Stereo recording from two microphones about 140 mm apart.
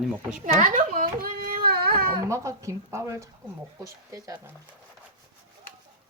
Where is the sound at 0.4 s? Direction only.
65° right (ahead or behind); by 2.1 s 90° right.